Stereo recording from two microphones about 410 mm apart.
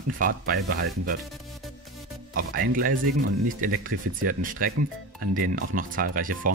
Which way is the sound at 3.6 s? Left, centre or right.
Centre.